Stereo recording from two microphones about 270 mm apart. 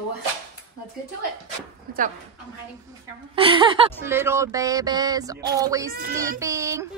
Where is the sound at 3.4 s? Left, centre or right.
Centre.